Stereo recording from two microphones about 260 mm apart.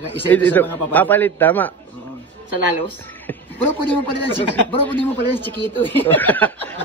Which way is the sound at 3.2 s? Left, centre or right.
Centre.